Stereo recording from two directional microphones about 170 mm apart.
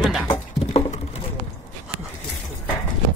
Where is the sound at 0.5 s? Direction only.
40° left (ahead or behind).